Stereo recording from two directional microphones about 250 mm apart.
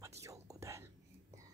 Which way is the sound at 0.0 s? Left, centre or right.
Centre.